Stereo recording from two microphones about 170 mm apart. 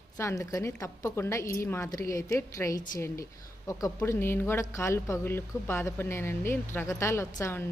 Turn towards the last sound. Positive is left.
turn(degrees=15)  # may be behind; listen again after turning